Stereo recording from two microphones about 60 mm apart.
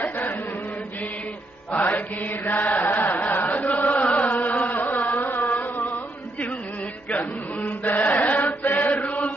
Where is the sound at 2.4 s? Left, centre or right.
Left.